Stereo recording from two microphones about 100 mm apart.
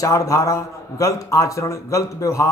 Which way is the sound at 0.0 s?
30° left (ahead or behind).